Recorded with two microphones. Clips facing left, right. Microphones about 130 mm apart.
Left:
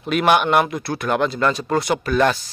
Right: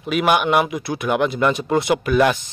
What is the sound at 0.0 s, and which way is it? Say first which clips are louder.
Speech: left 1 dB; 5° right (ahead or behind).